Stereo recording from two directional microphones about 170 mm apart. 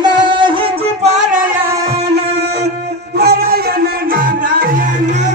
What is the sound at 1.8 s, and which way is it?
Music, 70° right (ahead or behind).